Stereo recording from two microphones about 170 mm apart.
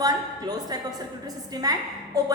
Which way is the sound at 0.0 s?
20° right (ahead or behind).